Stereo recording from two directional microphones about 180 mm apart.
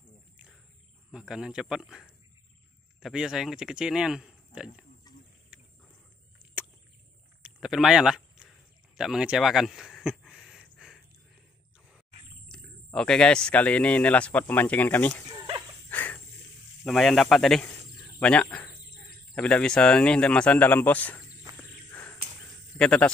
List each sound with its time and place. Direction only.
1.1 s speech: 5° right (ahead or behind)
7.4 s a sound: 5° right (ahead or behind)
12.4 s speech: 5° left (ahead or behind)
15.2 s dog: 30° right (ahead or behind)
15.9 s snake: 10° left (ahead or behind)
16.8 s speech: centre (ahead or behind)
21.9 s a sound: 10° left (ahead or behind)
22.8 s a man's voice: 5° left (ahead or behind)